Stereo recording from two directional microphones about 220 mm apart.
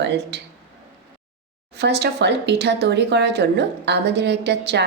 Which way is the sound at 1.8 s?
50° right (ahead or behind).